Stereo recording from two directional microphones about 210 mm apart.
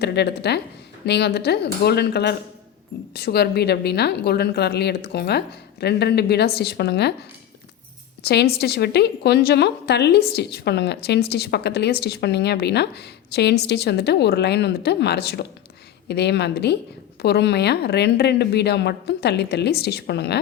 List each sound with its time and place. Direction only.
0.0 s a woman's voice: 55° left (ahead or behind)
8.2 s a woman's voice: 50° left (ahead or behind)